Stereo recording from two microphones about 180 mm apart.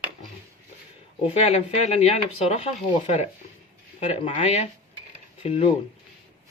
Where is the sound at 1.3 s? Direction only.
35° left (ahead or behind).